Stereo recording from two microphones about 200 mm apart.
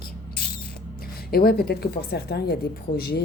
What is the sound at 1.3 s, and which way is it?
Speech, 50° left (ahead or behind).